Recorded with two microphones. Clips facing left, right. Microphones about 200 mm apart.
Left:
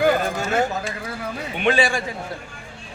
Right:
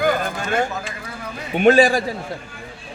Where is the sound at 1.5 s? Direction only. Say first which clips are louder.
Right 7 dB; 45° right (ahead or behind).